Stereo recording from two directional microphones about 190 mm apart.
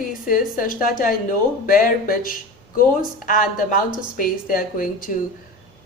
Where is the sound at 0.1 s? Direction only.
45° left (ahead or behind).